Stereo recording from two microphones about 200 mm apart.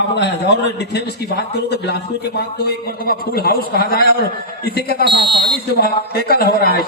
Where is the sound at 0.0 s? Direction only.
60° left (ahead or behind).